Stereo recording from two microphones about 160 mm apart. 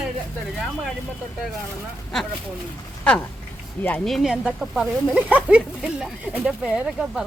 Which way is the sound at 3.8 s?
5° left (ahead or behind).